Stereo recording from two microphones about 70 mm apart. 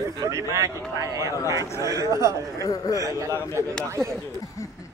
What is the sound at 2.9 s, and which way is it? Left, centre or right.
Speech, right.